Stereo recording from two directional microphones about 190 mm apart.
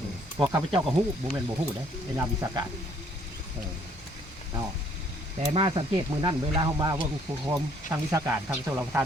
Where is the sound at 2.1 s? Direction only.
15° right (ahead or behind).